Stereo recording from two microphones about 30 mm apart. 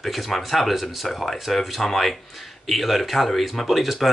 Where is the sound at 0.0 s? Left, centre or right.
Centre.